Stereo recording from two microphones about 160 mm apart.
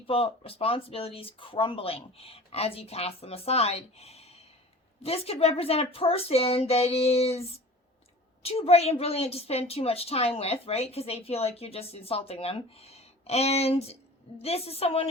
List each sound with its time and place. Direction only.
0.1 s a woman's voice: 35° left (ahead or behind)
8.4 s a woman's voice: 40° left (ahead or behind)